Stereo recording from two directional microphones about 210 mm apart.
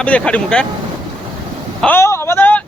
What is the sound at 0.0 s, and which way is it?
Speech, 5° left (ahead or behind).